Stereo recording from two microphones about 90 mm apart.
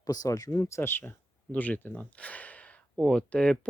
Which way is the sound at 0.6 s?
25° left (ahead or behind).